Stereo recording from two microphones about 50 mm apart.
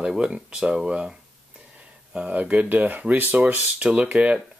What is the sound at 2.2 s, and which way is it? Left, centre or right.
Speech, right.